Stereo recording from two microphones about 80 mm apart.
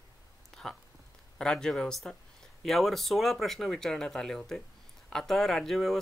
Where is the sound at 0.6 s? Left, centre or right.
Centre.